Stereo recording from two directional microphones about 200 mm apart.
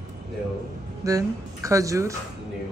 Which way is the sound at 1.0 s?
15° right (ahead or behind).